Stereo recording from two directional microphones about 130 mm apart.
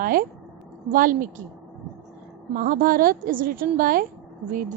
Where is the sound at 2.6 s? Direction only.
90° right.